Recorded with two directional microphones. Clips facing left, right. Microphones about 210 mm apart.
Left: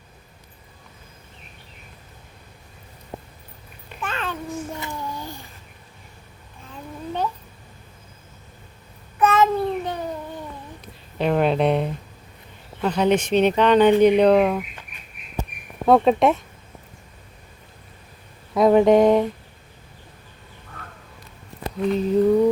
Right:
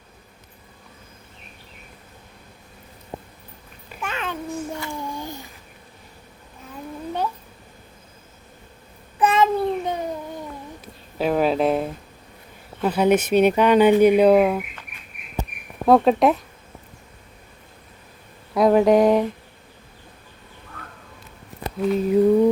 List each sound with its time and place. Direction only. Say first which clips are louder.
4.0 s babbling: even; 10° right (ahead or behind)
9.1 s child singing: even; 15° right (ahead or behind)
11.2 s speech: even; 5° right (ahead or behind)
15.9 s speech: even; centre (ahead or behind)
18.5 s speech: left 1 dB; centre (ahead or behind)
21.8 s speech: right 1 dB; 5° right (ahead or behind)